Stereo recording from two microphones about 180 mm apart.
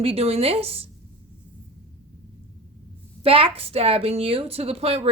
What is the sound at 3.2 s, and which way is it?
A woman's voice, 30° right (ahead or behind).